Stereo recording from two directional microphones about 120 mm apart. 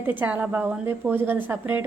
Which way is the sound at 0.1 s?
15° right (ahead or behind).